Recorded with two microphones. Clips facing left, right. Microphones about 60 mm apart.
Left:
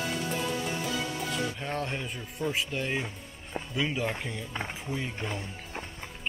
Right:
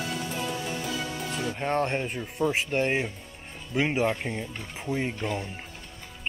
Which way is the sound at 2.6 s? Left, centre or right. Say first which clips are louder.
Right 6 dB; right.